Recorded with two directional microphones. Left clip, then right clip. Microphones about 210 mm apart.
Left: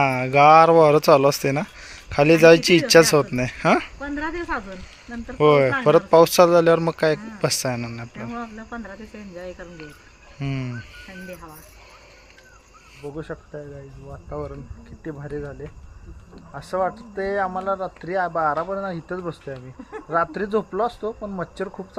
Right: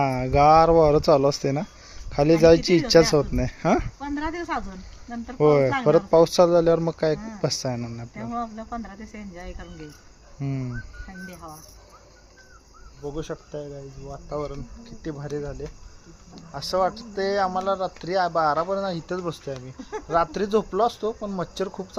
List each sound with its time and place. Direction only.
0.0 s speech: 5° right (ahead or behind)
4.1 s speech: 35° right (ahead or behind)
5.4 s speech: 5° right (ahead or behind)
8.4 s speech: 30° right (ahead or behind)
10.4 s speech: centre (ahead or behind)
13.0 s speech: 5° right (ahead or behind)